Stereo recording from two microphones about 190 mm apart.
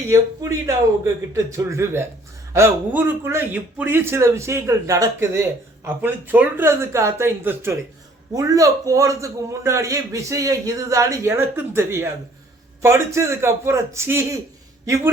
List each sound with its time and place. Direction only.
0.1 s a man's voice: 15° right (ahead or behind)